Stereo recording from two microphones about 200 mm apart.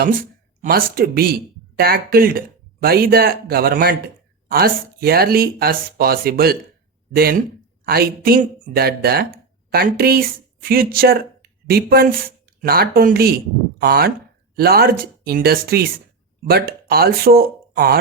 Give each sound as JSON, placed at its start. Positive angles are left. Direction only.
{"t": 0.0, "sound": "speech", "side_deg": -45}